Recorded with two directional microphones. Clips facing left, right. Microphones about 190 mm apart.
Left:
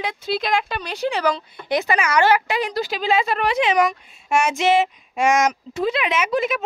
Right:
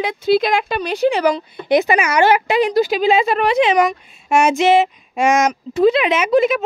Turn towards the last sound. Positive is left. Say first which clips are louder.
# right 7 dB
turn(degrees=-25)  # may be behind; listen again after turning